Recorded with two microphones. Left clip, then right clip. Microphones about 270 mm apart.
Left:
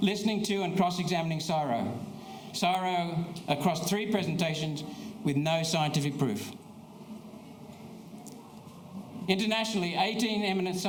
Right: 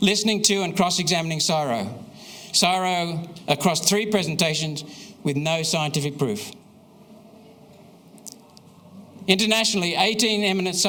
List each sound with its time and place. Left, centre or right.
0.0 s a man's voice: right
9.2 s a man's voice: right